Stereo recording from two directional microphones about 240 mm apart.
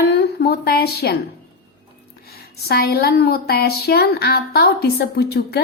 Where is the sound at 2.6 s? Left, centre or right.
Left.